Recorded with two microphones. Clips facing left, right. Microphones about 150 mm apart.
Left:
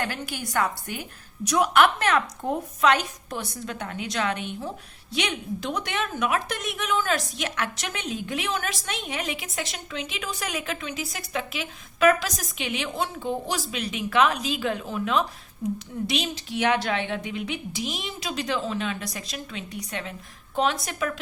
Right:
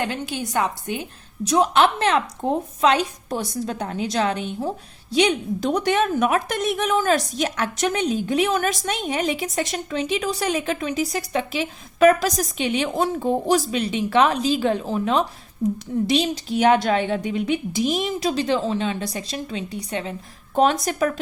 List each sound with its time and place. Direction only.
0.0 s a woman's voice: 20° right (ahead or behind)
20.6 s a woman's voice: 45° right (ahead or behind)